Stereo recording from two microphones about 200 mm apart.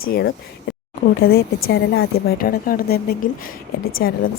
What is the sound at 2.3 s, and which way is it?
Speech, 45° left (ahead or behind).